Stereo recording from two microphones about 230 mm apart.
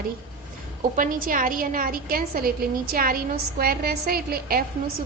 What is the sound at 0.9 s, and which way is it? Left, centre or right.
A woman's voice, right.